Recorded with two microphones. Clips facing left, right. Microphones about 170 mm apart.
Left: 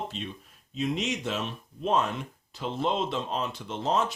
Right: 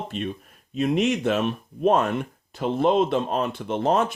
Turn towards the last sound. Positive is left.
turn(degrees=-55)  # may be behind; listen again after turning